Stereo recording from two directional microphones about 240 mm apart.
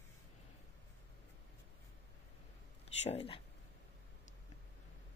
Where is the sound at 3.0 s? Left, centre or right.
Left.